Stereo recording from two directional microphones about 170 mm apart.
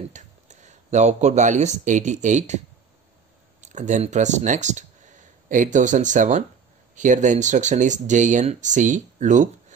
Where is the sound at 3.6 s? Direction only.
45° right (ahead or behind).